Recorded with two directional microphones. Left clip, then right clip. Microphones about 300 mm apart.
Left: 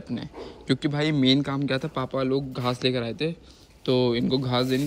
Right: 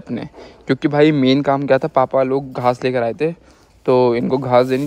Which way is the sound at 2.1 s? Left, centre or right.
Right.